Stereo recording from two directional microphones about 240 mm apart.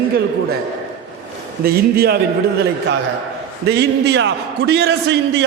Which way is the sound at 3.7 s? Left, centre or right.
Right.